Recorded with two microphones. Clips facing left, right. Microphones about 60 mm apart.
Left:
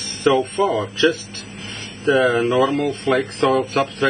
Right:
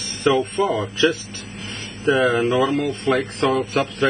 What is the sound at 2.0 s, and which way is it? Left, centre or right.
A man's voice, centre.